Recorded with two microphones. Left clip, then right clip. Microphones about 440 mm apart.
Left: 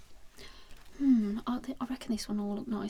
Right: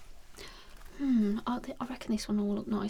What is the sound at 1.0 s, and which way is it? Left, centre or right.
Speech, right.